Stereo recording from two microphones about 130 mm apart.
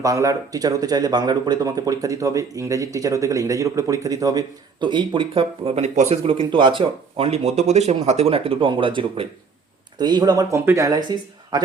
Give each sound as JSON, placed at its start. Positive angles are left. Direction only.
{"t": 0.0, "sound": "speech", "side_deg": -25}
{"t": 6.2, "sound": "speech", "side_deg": -40}